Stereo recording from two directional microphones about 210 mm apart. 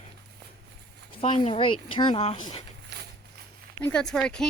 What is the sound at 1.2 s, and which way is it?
A woman's voice, 25° left (ahead or behind).